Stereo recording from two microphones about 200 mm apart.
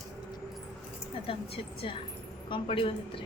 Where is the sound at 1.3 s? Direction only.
30° left (ahead or behind).